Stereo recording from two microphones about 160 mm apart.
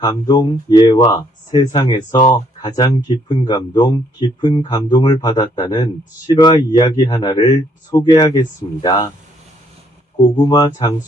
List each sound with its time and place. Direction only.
0.0 s speech: 25° left (ahead or behind)
10.2 s speech: 25° left (ahead or behind)